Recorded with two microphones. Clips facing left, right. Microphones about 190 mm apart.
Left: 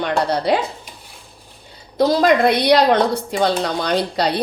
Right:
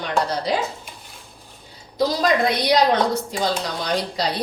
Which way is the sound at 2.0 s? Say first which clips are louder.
Left 5 dB; 60° left (ahead or behind).